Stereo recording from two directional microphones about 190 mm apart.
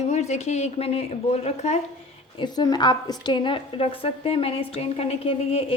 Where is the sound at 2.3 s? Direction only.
25° left (ahead or behind).